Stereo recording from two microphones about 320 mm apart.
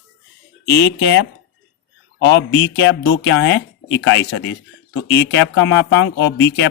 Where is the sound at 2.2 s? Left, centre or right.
Left.